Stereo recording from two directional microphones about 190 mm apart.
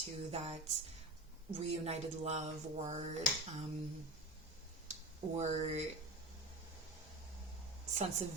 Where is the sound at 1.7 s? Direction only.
35° right (ahead or behind).